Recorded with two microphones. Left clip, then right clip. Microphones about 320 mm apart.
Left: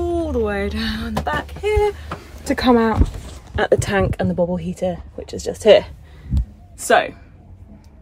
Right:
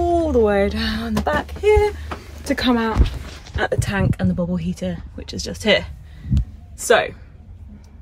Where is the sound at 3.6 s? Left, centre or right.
Left.